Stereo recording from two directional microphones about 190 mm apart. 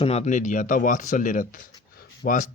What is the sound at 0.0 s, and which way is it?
Speech, 35° left (ahead or behind).